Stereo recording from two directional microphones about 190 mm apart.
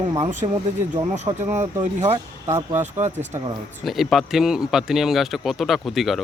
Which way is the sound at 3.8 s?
Centre (ahead or behind).